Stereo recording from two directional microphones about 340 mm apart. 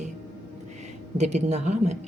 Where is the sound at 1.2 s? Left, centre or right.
Centre.